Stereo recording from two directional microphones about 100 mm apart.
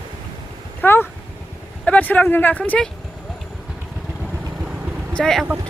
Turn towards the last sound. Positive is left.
turn(degrees=5)  # may be behind; listen again after turning